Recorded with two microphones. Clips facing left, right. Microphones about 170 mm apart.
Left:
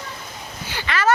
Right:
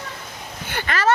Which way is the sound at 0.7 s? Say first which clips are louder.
Even; 50° right (ahead or behind).